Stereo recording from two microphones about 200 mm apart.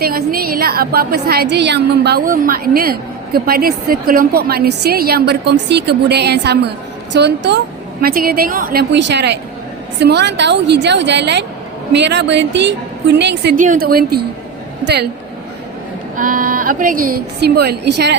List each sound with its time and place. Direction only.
0.0 s a woman's voice: 50° right (ahead or behind)
8.0 s a woman's voice: 45° right (ahead or behind)
13.6 s a woman's voice: 45° right (ahead or behind)
16.1 s a woman's voice: 40° right (ahead or behind); by 18.2 s 60° right (ahead or behind)